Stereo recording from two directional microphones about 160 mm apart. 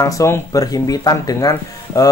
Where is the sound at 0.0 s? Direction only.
20° left (ahead or behind).